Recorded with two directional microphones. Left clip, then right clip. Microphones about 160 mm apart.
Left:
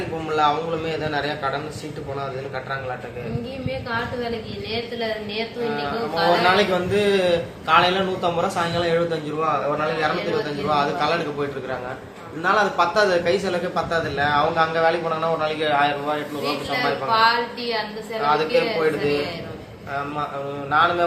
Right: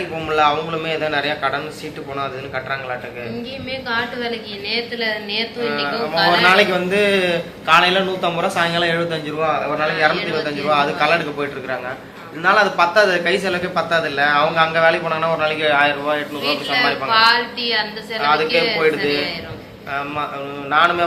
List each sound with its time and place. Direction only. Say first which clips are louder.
0.3 s a man's voice: right 4 dB; centre (ahead or behind)
3.8 s a woman's voice: right 5 dB; 25° left (ahead or behind)
5.6 s a man's voice: right 3 dB; 10° right (ahead or behind)
17.1 s a woman's voice: right 3 dB; 25° left (ahead or behind)
18.2 s a man's voice: right 3 dB; centre (ahead or behind)
20.7 s a man's voice: right 3 dB; centre (ahead or behind)